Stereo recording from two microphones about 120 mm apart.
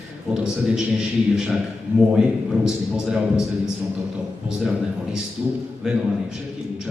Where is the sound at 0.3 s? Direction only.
5° right (ahead or behind).